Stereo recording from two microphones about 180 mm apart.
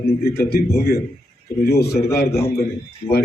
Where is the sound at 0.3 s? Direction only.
60° left (ahead or behind).